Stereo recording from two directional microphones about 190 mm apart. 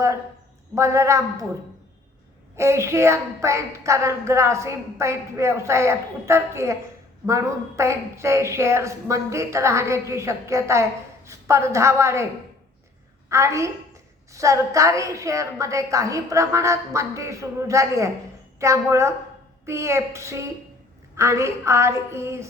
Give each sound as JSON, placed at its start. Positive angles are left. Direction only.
{"t": 0.8, "sound": "a woman's voice", "side_deg": -15}
{"t": 2.6, "sound": "a woman's voice", "side_deg": -15}
{"t": 13.3, "sound": "a woman's voice", "side_deg": -15}